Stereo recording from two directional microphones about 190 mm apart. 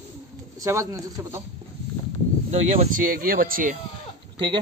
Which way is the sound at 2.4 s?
35° right (ahead or behind).